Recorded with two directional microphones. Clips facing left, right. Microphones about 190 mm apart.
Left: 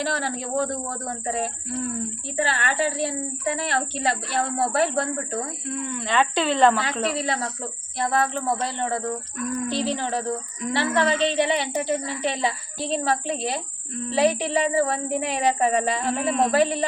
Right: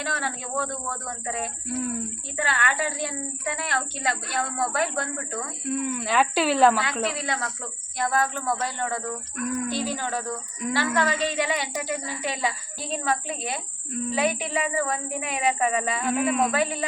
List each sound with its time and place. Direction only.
0.0 s a woman's voice: 35° left (ahead or behind)
1.7 s speech: 5° right (ahead or behind)
2.3 s a woman's voice: 30° left (ahead or behind)
5.6 s speech: 5° right (ahead or behind)
7.2 s a woman's voice: 30° left (ahead or behind)